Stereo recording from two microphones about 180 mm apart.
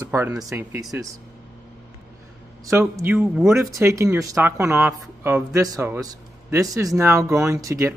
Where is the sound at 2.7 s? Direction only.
15° right (ahead or behind).